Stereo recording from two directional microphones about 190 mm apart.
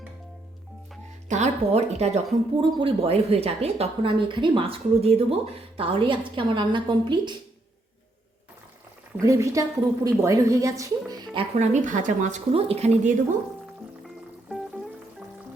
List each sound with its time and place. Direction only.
1.3 s a woman's voice: 35° right (ahead or behind)
9.1 s a woman's voice: 15° right (ahead or behind)
11.6 s a woman's voice: 40° right (ahead or behind)